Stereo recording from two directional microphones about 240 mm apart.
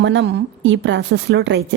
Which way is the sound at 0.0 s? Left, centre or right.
Right.